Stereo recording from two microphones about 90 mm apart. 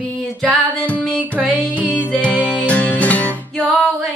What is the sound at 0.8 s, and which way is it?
Music, 15° left (ahead or behind).